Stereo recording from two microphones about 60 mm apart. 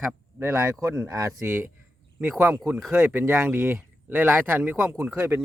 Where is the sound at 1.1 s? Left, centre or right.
Right.